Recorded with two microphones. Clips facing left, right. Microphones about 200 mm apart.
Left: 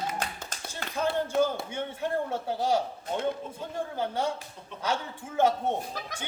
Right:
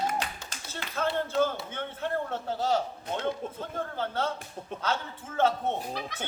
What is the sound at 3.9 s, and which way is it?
Speech, 10° left (ahead or behind).